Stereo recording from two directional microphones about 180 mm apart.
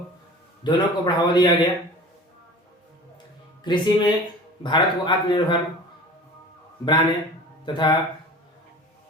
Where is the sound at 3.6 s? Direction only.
25° left (ahead or behind).